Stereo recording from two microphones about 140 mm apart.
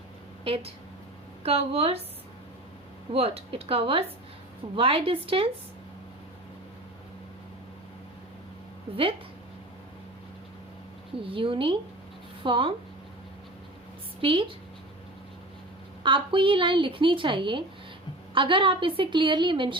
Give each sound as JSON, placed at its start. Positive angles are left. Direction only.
{"t": 0.4, "sound": "speech", "side_deg": -45}
{"t": 3.1, "sound": "a woman's voice", "side_deg": -45}
{"t": 8.9, "sound": "speech", "side_deg": -40}
{"t": 11.2, "sound": "a woman's voice", "side_deg": -40}
{"t": 14.2, "sound": "a woman's voice", "side_deg": -40}
{"t": 16.0, "sound": "a woman's voice", "side_deg": -35}